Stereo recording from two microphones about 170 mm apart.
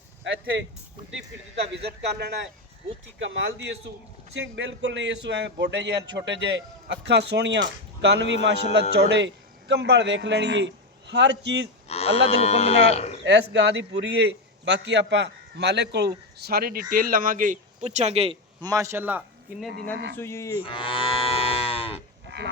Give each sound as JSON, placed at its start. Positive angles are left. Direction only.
{"t": 0.3, "sound": "speech", "side_deg": -90}
{"t": 1.7, "sound": "a man's voice", "side_deg": -85}
{"t": 3.2, "sound": "speech", "side_deg": -90}
{"t": 11.9, "sound": "speech", "side_deg": 35}
{"t": 13.2, "sound": "a man's voice", "side_deg": -90}
{"t": 18.6, "sound": "a man's voice", "side_deg": -20}
{"t": 20.1, "sound": "cattle", "side_deg": 15}
{"t": 20.6, "sound": "livestock", "side_deg": 30}